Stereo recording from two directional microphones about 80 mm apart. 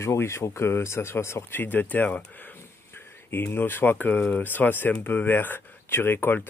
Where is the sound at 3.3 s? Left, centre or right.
Left.